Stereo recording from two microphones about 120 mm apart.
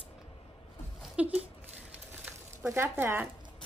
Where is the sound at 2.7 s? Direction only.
20° right (ahead or behind).